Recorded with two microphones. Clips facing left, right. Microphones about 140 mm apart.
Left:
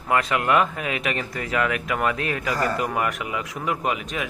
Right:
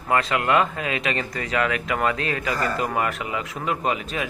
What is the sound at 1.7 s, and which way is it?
Speech, 90° right.